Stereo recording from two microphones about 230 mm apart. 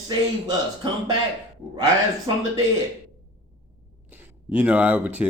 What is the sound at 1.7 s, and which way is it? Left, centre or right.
Speech, centre.